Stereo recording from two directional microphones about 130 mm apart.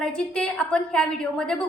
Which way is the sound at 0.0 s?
5° left (ahead or behind).